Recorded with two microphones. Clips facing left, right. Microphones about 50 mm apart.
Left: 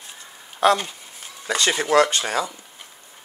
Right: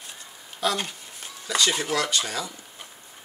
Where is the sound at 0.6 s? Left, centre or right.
Left.